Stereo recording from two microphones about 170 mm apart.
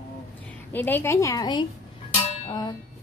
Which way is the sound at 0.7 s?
10° left (ahead or behind).